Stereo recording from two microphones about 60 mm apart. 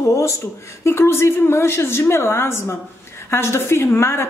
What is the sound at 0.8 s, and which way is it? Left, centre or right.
A woman's voice, left.